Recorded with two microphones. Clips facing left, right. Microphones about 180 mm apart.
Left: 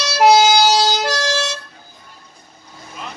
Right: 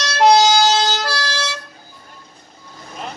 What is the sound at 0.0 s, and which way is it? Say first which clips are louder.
Emergency vehicle: left 1 dB; 5° left (ahead or behind).